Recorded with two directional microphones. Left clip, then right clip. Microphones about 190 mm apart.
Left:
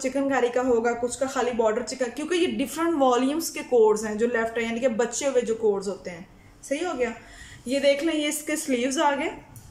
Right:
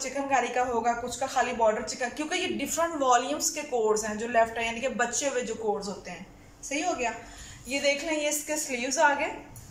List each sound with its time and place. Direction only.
0.0 s speech: 35° left (ahead or behind)
7.6 s speech: 40° left (ahead or behind)